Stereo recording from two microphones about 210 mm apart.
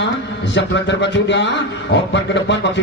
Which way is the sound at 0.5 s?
60° left (ahead or behind).